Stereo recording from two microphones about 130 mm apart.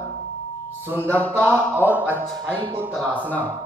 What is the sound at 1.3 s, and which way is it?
Speech, 15° right (ahead or behind).